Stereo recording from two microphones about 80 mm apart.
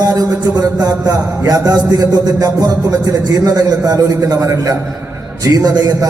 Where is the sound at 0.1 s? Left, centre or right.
Right.